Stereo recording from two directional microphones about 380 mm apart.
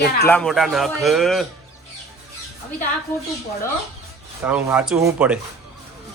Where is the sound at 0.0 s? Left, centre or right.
Left.